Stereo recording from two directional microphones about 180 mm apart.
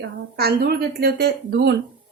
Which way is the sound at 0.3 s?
60° right (ahead or behind).